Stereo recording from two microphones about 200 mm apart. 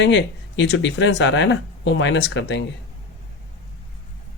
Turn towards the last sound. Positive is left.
turn(degrees=60)  # may be behind; listen again after turning